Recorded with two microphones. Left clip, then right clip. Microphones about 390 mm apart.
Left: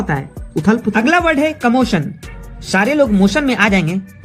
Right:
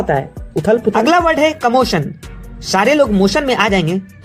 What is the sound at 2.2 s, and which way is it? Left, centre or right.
Music, centre.